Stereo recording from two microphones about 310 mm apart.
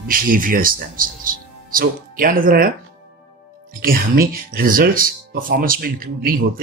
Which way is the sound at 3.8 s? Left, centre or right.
Right.